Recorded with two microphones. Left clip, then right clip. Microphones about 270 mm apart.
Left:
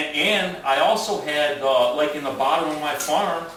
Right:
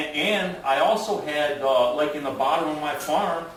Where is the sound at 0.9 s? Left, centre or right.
Right.